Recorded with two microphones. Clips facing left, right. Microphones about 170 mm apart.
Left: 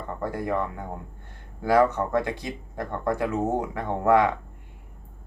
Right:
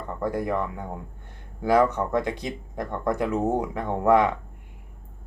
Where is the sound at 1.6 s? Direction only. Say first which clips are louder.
Even; 15° right (ahead or behind).